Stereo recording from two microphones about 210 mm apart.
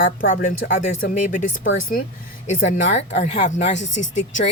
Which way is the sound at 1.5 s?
65° left (ahead or behind).